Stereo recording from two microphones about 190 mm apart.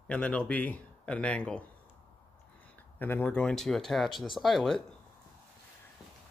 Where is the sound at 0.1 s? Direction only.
5° left (ahead or behind).